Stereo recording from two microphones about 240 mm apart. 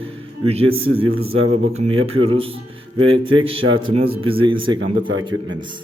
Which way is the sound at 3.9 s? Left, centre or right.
Right.